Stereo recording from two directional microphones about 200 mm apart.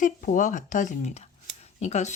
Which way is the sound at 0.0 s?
40° left (ahead or behind).